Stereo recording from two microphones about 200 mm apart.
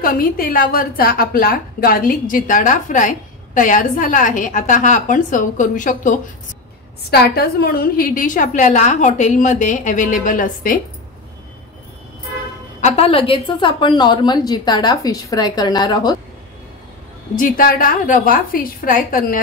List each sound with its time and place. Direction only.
0.0 s a woman's voice: 45° left (ahead or behind)
7.1 s a woman's voice: 50° left (ahead or behind)
12.8 s a woman's voice: 30° left (ahead or behind)
17.4 s a woman's voice: 45° left (ahead or behind)